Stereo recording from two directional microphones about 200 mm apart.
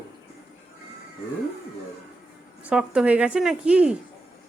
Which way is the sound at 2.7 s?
5° right (ahead or behind).